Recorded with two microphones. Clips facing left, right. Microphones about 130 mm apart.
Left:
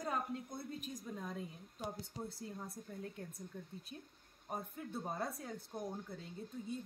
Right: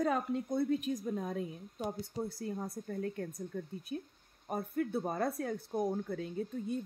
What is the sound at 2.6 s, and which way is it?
A woman's voice, 75° right (ahead or behind).